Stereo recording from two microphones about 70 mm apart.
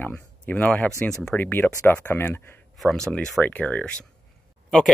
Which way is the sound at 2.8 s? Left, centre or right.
Centre.